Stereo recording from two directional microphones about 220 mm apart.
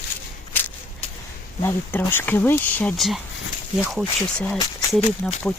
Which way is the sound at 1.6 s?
10° left (ahead or behind).